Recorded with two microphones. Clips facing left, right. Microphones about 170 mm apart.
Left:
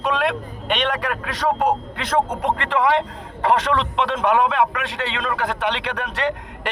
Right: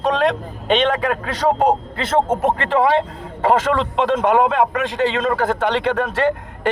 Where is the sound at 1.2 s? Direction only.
30° right (ahead or behind).